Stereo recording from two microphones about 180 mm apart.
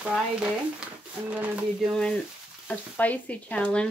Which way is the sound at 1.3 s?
5° right (ahead or behind).